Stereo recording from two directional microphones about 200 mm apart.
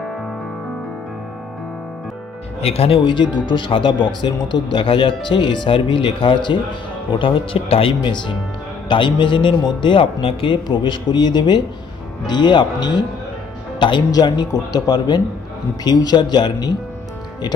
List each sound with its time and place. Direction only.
2.6 s speech: 30° left (ahead or behind)